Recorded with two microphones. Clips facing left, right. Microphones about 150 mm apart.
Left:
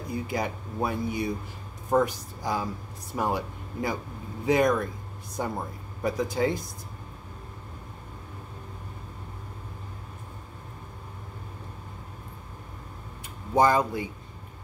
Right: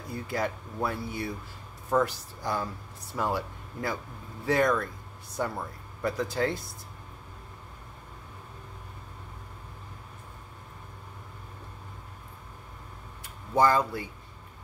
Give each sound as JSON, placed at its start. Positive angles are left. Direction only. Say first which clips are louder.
{"t": 0.1, "sound": "speech", "louder": "left 1 dB", "side_deg": 15}
{"t": 13.6, "sound": "speech", "louder": "left 2 dB", "side_deg": 20}